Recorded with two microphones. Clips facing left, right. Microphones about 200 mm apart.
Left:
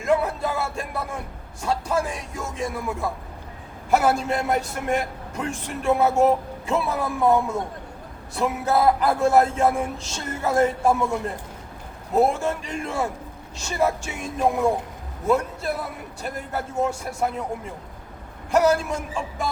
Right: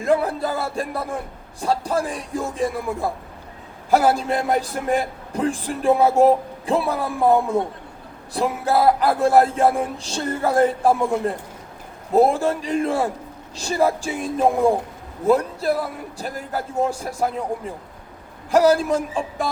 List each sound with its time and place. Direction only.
0.3 s a man's voice: 30° right (ahead or behind)
18.5 s a man's voice: 35° right (ahead or behind)